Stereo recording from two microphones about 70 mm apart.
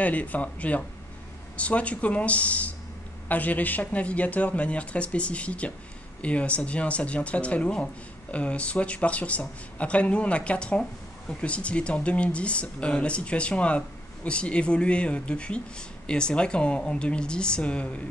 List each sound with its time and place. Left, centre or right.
0.0 s speech: left